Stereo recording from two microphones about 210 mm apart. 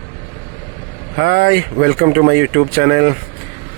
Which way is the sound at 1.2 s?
50° right (ahead or behind).